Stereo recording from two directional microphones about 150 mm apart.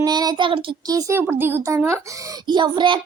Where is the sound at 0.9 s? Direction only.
20° right (ahead or behind).